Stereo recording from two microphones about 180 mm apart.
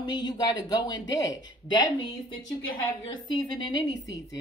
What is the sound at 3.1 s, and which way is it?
Speech, 25° left (ahead or behind).